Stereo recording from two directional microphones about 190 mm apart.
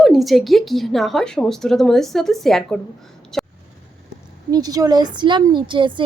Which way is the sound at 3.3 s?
Centre (ahead or behind).